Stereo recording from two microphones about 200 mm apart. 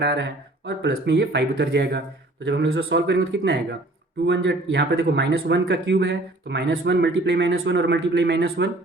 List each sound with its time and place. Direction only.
0.0 s speech: 60° right (ahead or behind)